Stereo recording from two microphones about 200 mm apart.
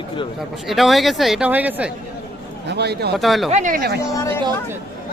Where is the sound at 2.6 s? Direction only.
55° right (ahead or behind).